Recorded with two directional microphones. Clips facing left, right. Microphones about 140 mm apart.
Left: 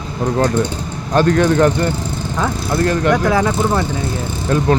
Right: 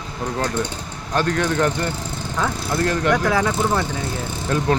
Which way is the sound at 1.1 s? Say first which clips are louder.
Left 7 dB; 40° left (ahead or behind).